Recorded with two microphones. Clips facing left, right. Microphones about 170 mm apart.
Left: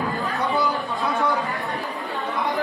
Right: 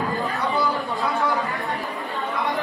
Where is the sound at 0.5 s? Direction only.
20° left (ahead or behind).